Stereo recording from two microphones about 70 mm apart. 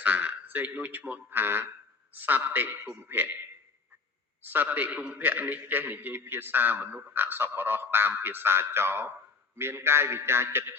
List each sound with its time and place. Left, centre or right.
0.0 s a man's voice: right
4.4 s a man's voice: right